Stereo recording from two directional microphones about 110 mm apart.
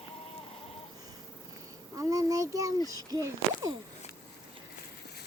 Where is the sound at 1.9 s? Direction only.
30° right (ahead or behind).